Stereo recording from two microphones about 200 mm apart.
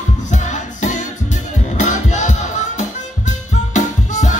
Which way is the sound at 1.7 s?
35° left (ahead or behind).